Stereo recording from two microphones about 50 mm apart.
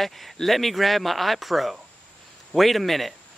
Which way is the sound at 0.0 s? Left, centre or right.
Centre.